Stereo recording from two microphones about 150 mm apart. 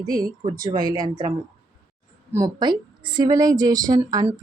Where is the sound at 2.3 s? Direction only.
25° right (ahead or behind).